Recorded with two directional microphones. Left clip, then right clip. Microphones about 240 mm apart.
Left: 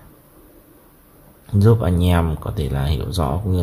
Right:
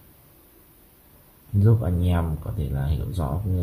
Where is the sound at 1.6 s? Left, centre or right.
Left.